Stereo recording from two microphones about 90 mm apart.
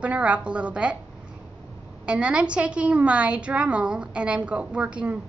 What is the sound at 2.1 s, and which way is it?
A woman's voice, 10° right (ahead or behind).